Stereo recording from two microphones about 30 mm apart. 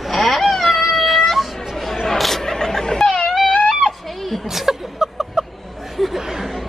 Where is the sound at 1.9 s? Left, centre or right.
Centre.